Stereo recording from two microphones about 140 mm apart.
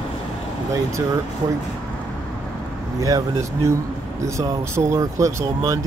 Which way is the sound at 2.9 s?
25° right (ahead or behind).